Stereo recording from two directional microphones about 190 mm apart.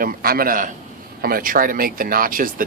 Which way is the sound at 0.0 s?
50° right (ahead or behind).